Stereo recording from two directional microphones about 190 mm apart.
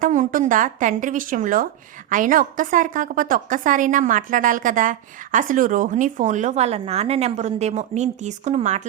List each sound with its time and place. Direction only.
0.0 s a woman's voice: 45° right (ahead or behind)